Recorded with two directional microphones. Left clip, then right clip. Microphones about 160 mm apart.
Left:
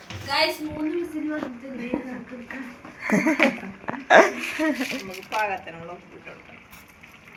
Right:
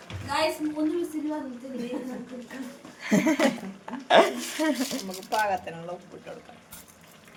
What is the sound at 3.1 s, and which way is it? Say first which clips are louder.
Speech: left 3 dB; 5° right (ahead or behind).